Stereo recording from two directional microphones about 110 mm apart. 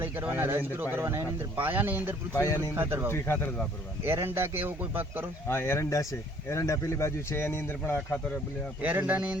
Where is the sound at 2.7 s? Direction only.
25° right (ahead or behind).